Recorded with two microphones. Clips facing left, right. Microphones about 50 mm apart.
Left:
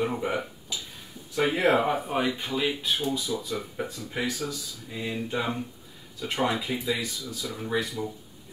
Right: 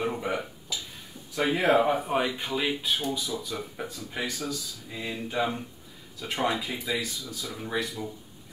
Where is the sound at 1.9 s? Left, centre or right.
Centre.